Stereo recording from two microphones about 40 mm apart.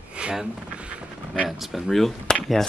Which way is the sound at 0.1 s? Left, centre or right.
Right.